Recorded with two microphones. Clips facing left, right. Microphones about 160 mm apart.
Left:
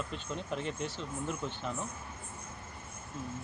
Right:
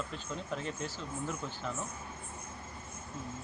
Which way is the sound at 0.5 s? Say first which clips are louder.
Left 2 dB; 15° left (ahead or behind).